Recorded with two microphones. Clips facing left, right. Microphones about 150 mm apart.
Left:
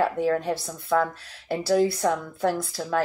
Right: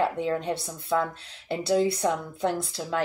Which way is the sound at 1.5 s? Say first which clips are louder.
Left 2 dB; 20° right (ahead or behind).